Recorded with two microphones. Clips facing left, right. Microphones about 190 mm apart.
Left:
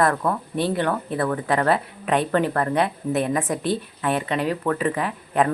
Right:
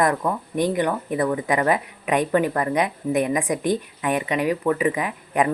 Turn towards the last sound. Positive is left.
turn(degrees=-15)  # may be behind; listen again after turning